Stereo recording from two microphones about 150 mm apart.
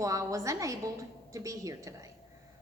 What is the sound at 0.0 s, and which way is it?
A woman's voice, 20° right (ahead or behind).